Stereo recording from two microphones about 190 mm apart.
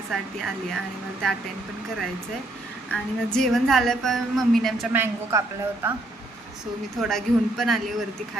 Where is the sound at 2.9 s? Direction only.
5° left (ahead or behind).